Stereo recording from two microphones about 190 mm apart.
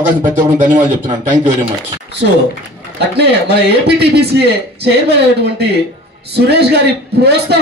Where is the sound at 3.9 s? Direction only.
60° right (ahead or behind).